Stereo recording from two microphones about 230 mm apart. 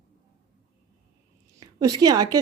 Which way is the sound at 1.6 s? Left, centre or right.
Centre.